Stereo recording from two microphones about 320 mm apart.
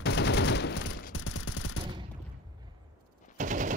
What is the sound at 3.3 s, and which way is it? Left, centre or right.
Machine gun, right.